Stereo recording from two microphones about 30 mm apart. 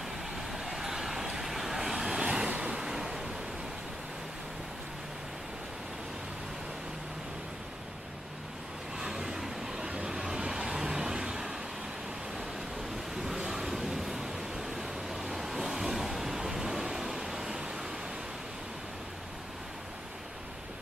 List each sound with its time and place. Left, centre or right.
0.7 s vehicle: centre
2.2 s waves: right
2.6 s vehicle: right
8.9 s vehicle: right
13.1 s vehicle: centre
13.5 s a sound: centre